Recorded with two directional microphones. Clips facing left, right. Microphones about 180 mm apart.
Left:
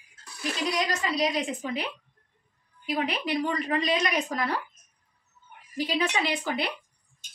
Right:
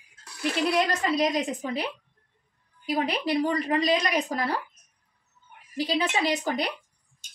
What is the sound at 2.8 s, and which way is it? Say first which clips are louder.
A woman's voice: right 2 dB; 35° right (ahead or behind).